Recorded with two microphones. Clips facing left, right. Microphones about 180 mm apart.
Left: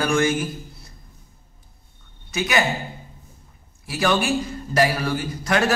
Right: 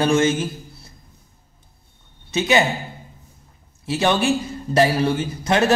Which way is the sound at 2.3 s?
25° right (ahead or behind).